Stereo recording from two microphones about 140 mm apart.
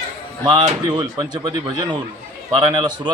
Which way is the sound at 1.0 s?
30° right (ahead or behind).